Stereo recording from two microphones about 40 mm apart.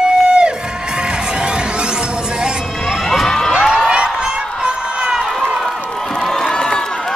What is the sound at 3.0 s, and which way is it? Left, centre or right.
Children shouting, centre.